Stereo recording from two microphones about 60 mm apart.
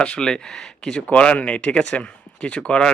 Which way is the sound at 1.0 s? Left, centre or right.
Left.